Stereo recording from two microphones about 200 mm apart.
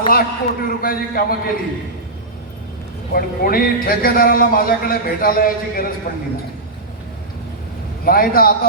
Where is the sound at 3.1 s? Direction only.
50° left (ahead or behind).